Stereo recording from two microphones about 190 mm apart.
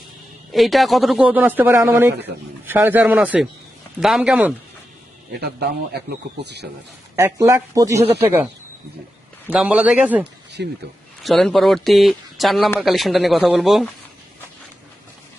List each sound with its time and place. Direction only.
0.5 s speech: centre (ahead or behind)
5.4 s a man's voice: 60° right (ahead or behind)
7.2 s speech: 15° right (ahead or behind)
9.5 s speech: 5° right (ahead or behind)
10.6 s a man's voice: 65° right (ahead or behind)
11.2 s speech: centre (ahead or behind)